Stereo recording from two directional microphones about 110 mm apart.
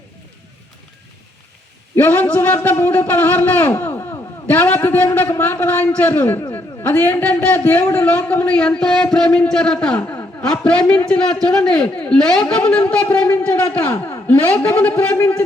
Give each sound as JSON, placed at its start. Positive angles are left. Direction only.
{"t": 2.0, "sound": "a man's voice", "side_deg": 20}